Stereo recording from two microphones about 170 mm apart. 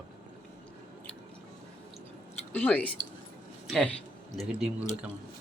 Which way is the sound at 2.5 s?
10° left (ahead or behind).